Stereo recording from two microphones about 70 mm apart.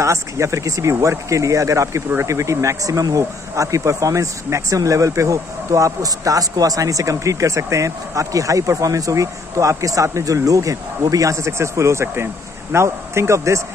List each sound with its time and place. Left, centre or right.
0.0 s speech: right